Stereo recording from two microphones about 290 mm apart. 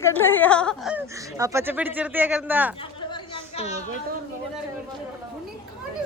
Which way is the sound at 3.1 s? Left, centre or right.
Left.